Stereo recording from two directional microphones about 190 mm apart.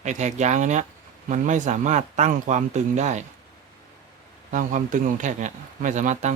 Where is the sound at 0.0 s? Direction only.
40° right (ahead or behind).